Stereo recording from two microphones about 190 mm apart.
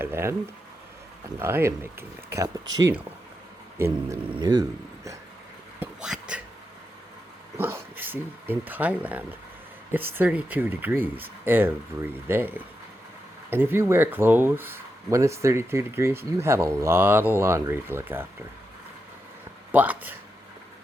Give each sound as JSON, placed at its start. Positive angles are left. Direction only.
{"t": 0.0, "sound": "speech", "side_deg": -10}
{"t": 1.4, "sound": "speech", "side_deg": -10}
{"t": 5.8, "sound": "a sound", "side_deg": -5}
{"t": 7.6, "sound": "speech", "side_deg": -10}
{"t": 19.7, "sound": "speech", "side_deg": -10}